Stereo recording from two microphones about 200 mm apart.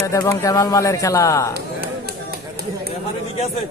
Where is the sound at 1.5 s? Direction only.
50° right (ahead or behind).